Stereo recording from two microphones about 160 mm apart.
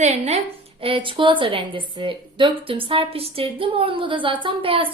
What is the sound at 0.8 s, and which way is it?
A woman's voice, 30° right (ahead or behind).